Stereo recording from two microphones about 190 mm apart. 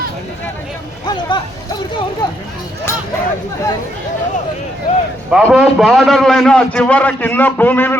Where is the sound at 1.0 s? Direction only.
20° left (ahead or behind).